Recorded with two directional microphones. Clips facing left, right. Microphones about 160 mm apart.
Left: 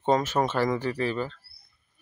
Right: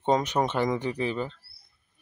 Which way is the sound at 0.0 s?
15° right (ahead or behind).